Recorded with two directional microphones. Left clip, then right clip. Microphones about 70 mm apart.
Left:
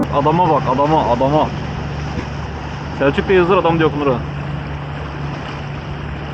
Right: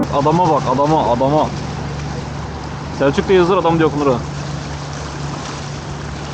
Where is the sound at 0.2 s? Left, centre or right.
Right.